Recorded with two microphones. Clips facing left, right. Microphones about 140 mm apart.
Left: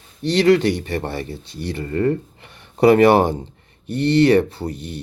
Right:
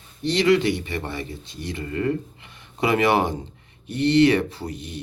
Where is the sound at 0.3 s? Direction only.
50° left (ahead or behind).